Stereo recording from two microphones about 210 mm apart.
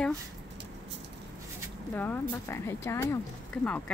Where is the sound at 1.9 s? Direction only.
10° left (ahead or behind).